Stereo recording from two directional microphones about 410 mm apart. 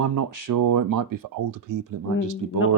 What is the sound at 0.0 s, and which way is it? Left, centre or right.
Speech, right.